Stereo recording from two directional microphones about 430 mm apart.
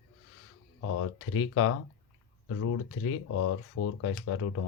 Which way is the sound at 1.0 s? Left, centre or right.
Left.